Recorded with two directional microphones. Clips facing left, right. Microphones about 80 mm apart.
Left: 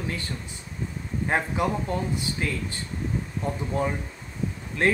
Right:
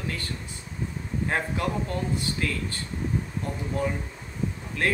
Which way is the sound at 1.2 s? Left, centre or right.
Centre.